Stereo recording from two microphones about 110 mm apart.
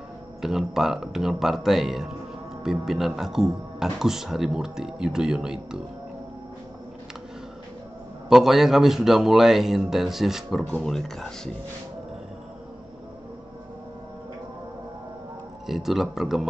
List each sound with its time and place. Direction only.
0.4 s speech: 5° right (ahead or behind)
8.3 s speech: 5° right (ahead or behind)
15.6 s speech: centre (ahead or behind)